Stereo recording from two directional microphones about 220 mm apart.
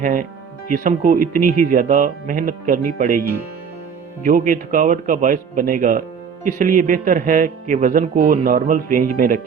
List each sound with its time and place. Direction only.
0.0 s music: 35° right (ahead or behind)
4.2 s music: 40° right (ahead or behind)